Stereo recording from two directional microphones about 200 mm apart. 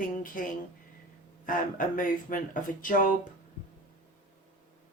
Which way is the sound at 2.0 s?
45° left (ahead or behind).